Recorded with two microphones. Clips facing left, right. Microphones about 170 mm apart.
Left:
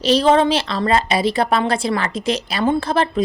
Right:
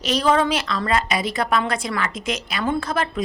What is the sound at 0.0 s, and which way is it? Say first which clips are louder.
A woman's voice: left 5 dB; 30° left (ahead or behind).